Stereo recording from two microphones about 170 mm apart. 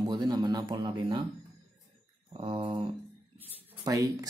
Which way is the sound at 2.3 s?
30° right (ahead or behind).